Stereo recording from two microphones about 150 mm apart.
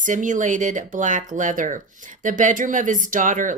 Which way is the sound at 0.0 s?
60° right (ahead or behind).